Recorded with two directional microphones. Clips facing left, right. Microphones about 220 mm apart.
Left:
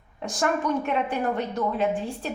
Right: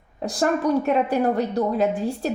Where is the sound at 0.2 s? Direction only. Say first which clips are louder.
Right 4 dB; 35° right (ahead or behind).